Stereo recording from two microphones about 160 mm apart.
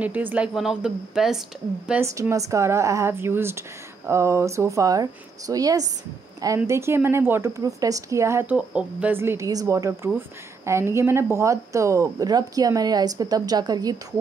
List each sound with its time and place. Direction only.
0.0 s speech: 10° right (ahead or behind)
1.9 s a woman's voice: 15° right (ahead or behind)